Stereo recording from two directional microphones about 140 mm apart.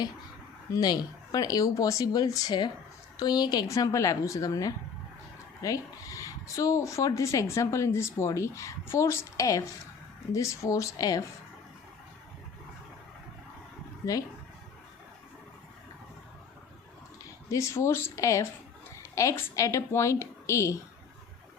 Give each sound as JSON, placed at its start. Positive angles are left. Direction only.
{"t": 0.7, "sound": "speech", "side_deg": 25}
{"t": 14.0, "sound": "speech", "side_deg": 25}
{"t": 17.5, "sound": "speech", "side_deg": 20}